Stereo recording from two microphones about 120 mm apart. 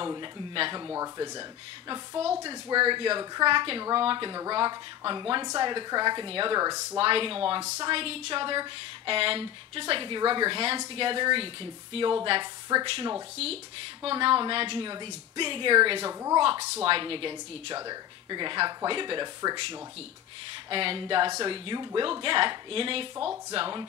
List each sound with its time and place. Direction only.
0.0 s a woman's voice: 40° right (ahead or behind)
0.8 s speech: 25° right (ahead or behind)
2.4 s a woman's voice: 45° right (ahead or behind)
6.6 s speech: 25° right (ahead or behind)
7.0 s a woman's voice: 50° right (ahead or behind)
12.8 s a woman's voice: 50° right (ahead or behind)
16.1 s speech: 25° right (ahead or behind)
16.7 s a woman's voice: 45° right (ahead or behind)